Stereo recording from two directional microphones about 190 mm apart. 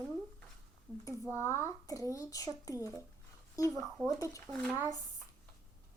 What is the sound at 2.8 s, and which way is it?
Speech, 15° right (ahead or behind).